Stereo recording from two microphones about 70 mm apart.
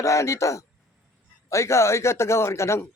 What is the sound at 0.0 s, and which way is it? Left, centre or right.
A man's voice, left.